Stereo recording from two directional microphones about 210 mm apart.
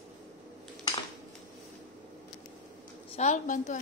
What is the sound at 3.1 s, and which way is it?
Speech, 35° left (ahead or behind).